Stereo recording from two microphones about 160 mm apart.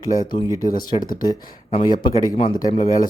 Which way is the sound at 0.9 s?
35° left (ahead or behind).